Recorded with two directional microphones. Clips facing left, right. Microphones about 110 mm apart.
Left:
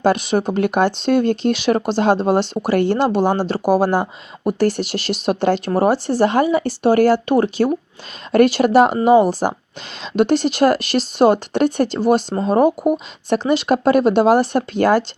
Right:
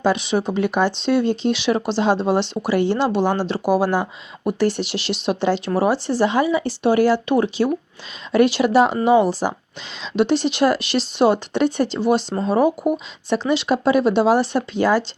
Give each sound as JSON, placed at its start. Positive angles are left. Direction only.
{"t": 0.0, "sound": "speech", "side_deg": 50}